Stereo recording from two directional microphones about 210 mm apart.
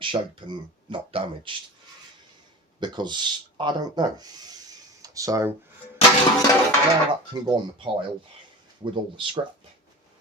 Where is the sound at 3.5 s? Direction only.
20° right (ahead or behind).